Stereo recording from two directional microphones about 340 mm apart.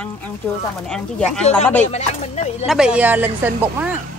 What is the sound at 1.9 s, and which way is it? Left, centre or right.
Speech, centre.